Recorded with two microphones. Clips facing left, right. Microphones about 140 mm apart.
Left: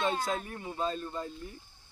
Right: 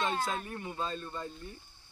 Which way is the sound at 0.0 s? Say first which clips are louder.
Left 2 dB; 10° left (ahead or behind).